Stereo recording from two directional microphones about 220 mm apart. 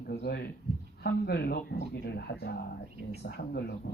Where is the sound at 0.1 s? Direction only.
50° left (ahead or behind).